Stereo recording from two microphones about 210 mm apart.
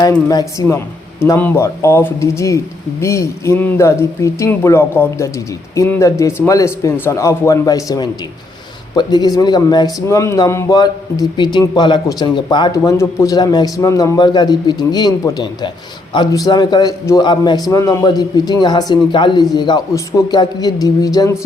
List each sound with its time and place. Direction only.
0.0 s a man's voice: 15° left (ahead or behind)